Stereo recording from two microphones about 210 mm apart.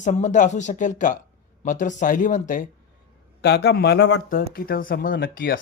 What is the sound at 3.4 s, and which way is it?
Speech, 50° left (ahead or behind).